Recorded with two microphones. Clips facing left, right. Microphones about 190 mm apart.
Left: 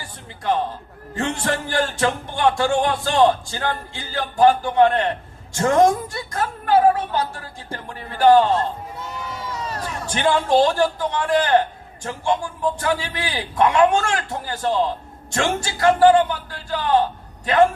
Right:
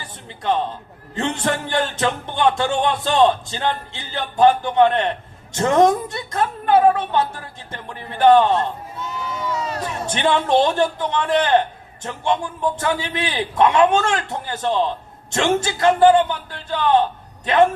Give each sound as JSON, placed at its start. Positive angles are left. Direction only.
{"t": 0.0, "sound": "a sound", "side_deg": -20}
{"t": 1.1, "sound": "speech", "side_deg": -20}
{"t": 9.8, "sound": "a man's voice", "side_deg": -25}